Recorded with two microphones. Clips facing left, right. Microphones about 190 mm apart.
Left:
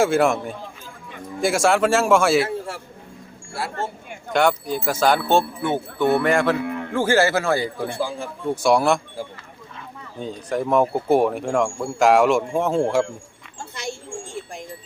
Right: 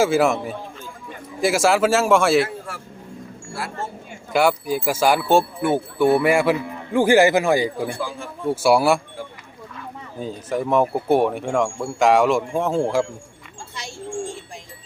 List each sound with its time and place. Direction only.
0.0 s speech: centre (ahead or behind)
4.3 s speech: 5° right (ahead or behind)
7.9 s speech: 25° left (ahead or behind)
8.4 s speech: 5° right (ahead or behind)
10.2 s speech: 5° right (ahead or behind)